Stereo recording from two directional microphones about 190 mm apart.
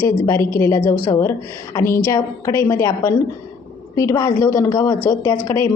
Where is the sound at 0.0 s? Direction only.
15° left (ahead or behind).